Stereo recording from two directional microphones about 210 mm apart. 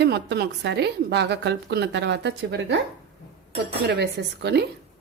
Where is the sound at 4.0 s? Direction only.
55° right (ahead or behind).